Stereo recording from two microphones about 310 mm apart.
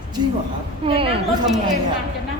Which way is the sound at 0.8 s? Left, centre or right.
Centre.